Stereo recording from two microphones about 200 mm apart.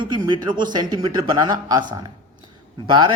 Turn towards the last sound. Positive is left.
turn(degrees=-25)  # may be behind; listen again after turning